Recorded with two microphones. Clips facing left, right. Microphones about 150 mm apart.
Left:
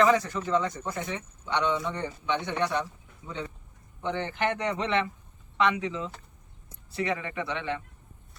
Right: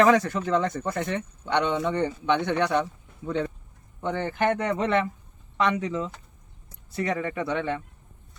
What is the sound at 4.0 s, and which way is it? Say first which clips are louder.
Speech: right 3 dB; 45° right (ahead or behind).